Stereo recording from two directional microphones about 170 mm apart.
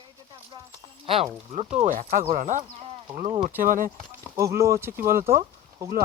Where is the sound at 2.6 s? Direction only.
35° right (ahead or behind).